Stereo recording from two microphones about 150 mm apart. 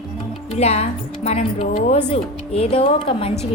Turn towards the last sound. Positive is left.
turn(degrees=40)  # may be behind; listen again after turning